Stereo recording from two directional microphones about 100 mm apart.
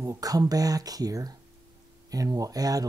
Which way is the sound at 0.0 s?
35° right (ahead or behind).